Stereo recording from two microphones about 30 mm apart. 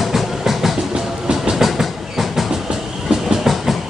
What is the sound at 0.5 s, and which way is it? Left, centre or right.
Music, centre.